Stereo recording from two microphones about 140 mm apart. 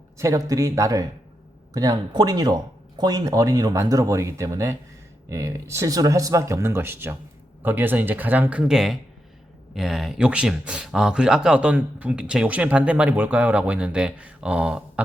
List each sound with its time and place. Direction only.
0.2 s speech: 25° right (ahead or behind); by 15.0 s 5° right (ahead or behind)